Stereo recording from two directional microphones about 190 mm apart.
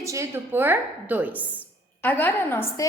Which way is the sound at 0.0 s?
15° right (ahead or behind).